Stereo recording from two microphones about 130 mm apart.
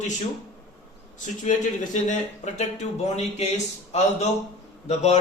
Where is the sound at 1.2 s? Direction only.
75° left (ahead or behind); by 3.5 s 55° left (ahead or behind).